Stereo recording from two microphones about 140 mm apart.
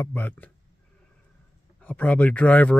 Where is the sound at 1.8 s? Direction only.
10° left (ahead or behind).